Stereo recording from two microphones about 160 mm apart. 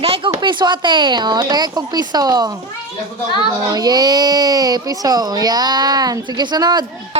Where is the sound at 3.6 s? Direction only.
25° right (ahead or behind).